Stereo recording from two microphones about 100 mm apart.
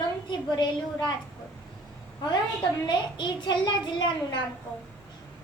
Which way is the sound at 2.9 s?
50° left (ahead or behind).